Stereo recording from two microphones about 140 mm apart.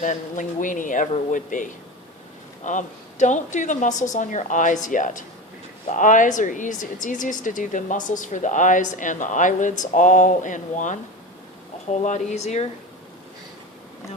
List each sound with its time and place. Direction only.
0.0 s speech: 60° left (ahead or behind)